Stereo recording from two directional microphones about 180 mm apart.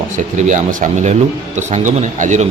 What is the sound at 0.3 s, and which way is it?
A man's voice, 45° right (ahead or behind).